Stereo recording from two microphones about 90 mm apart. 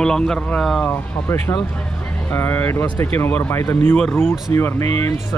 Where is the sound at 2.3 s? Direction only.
20° left (ahead or behind).